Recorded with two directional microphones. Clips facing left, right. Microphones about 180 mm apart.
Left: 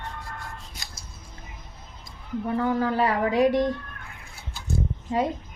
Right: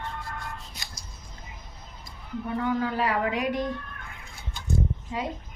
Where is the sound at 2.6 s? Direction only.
35° left (ahead or behind).